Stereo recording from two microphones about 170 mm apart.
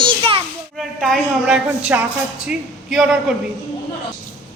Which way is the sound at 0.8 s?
Centre (ahead or behind).